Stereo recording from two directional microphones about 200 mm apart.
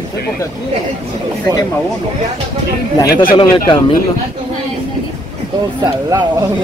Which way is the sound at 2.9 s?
20° left (ahead or behind).